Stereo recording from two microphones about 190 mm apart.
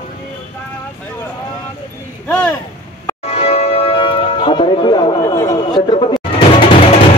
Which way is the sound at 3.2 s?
35° left (ahead or behind).